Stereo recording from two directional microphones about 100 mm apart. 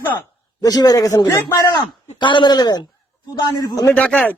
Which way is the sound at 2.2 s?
55° left (ahead or behind).